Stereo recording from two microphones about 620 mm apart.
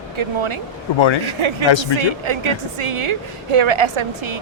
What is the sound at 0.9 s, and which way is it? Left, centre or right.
Speech, left.